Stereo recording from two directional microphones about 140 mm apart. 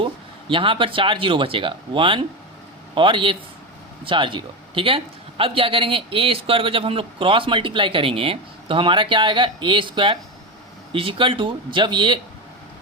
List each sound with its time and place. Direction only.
0.0 s a man's voice: 35° right (ahead or behind)